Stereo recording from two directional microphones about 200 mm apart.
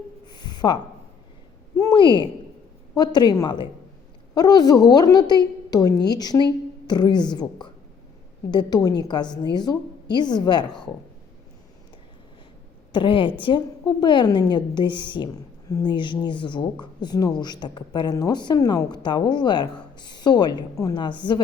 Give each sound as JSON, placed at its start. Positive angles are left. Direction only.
{"t": 0.3, "sound": "a sound", "side_deg": 20}
{"t": 2.9, "sound": "a woman's voice", "side_deg": 20}
{"t": 12.9, "sound": "a woman's voice", "side_deg": 25}